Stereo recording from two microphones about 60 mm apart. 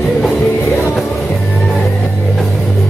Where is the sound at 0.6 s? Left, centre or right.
Left.